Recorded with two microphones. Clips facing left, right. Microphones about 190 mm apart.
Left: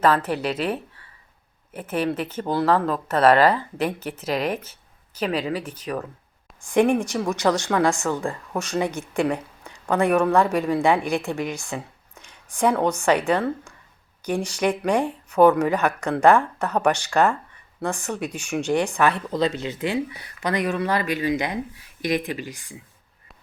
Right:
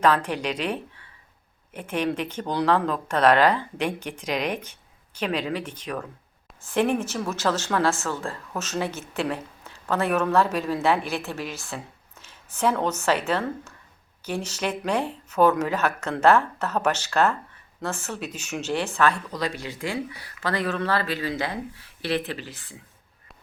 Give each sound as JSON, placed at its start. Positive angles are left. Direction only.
{"t": 0.0, "sound": "speech", "side_deg": 5}